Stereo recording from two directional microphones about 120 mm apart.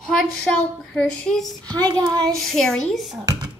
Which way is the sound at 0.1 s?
5° left (ahead or behind).